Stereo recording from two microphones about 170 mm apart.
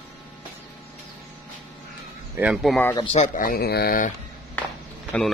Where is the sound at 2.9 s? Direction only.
35° left (ahead or behind).